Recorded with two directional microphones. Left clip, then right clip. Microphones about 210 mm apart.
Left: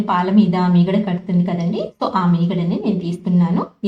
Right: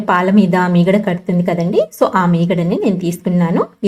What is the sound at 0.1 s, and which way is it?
A woman's voice, 20° right (ahead or behind).